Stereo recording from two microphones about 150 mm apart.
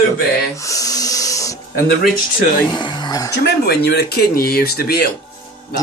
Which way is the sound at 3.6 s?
90° left.